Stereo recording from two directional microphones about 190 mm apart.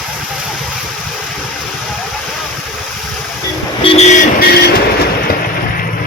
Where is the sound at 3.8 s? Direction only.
30° left (ahead or behind).